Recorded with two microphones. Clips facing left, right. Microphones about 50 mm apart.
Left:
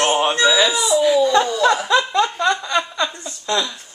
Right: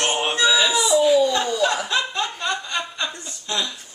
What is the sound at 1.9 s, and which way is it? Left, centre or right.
Chuckle, left.